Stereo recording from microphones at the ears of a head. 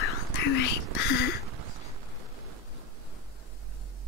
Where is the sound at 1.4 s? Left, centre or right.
Right.